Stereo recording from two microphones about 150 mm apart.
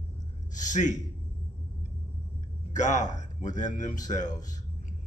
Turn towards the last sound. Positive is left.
turn(degrees=55)  # may be behind; listen again after turning